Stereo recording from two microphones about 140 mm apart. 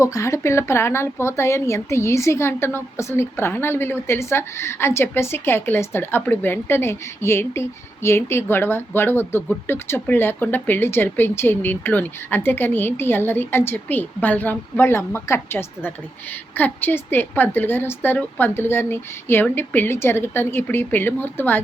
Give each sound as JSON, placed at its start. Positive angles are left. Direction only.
{"t": 0.0, "sound": "speech", "side_deg": 20}